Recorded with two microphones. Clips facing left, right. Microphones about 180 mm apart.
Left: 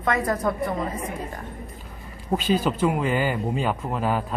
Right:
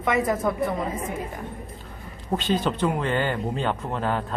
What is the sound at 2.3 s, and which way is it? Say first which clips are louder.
Speech: left 2 dB; 5° left (ahead or behind).